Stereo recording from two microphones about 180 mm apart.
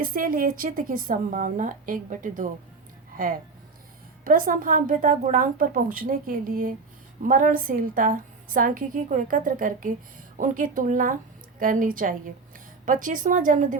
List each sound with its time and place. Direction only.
0.0 s a woman's voice: 50° right (ahead or behind)
4.2 s a woman's voice: 50° right (ahead or behind)